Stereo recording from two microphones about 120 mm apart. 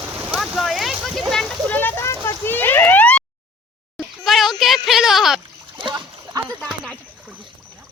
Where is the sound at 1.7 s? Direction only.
20° left (ahead or behind).